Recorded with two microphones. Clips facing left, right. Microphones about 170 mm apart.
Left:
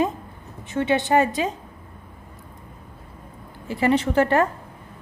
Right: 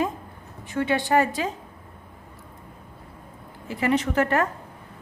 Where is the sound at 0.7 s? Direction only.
25° left (ahead or behind).